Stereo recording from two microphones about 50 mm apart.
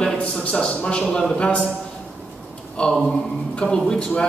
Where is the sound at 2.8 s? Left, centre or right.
Left.